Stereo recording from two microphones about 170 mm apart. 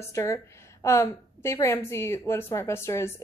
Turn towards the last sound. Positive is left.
turn(degrees=15)  # may be behind; listen again after turning